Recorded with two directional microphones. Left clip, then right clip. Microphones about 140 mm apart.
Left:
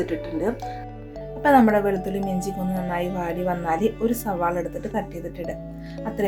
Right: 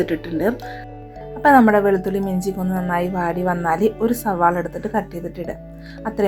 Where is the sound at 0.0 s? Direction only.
35° right (ahead or behind).